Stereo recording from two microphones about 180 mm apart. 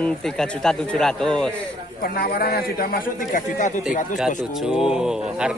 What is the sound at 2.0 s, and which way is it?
A man's voice, 55° left (ahead or behind).